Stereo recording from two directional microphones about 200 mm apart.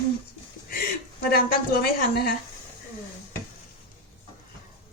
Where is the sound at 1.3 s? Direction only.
50° left (ahead or behind).